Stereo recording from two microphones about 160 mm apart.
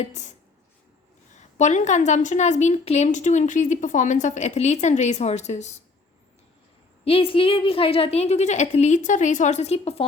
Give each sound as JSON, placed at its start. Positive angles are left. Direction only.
{"t": 0.0, "sound": "a woman's voice", "side_deg": 45}
{"t": 1.5, "sound": "a woman's voice", "side_deg": 50}
{"t": 7.0, "sound": "a woman's voice", "side_deg": 35}